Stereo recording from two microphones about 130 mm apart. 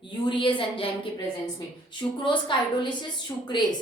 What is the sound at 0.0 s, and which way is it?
A woman's voice, 40° left (ahead or behind).